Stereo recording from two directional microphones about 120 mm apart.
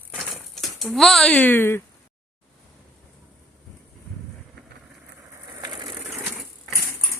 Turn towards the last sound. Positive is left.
turn(degrees=-40)  # may be behind; listen again after turning